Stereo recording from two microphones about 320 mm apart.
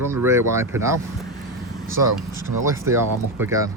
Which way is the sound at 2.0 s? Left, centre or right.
Right.